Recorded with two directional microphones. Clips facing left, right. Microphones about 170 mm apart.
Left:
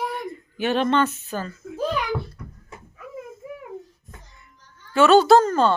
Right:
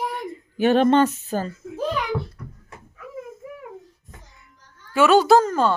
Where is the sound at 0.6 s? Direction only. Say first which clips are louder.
Right 5 dB; 45° right (ahead or behind).